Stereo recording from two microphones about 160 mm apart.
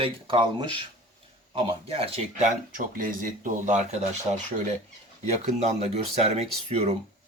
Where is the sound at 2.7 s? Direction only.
60° right (ahead or behind).